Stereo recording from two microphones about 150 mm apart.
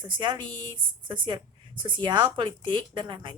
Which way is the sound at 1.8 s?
30° right (ahead or behind).